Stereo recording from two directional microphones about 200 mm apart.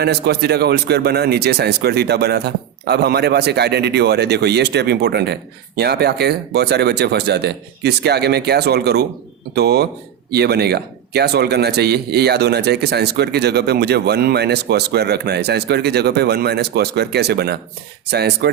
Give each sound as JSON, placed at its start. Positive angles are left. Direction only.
{"t": 0.0, "sound": "a man's voice", "side_deg": -55}